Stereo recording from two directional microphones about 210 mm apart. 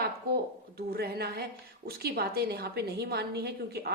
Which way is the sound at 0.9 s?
50° right (ahead or behind).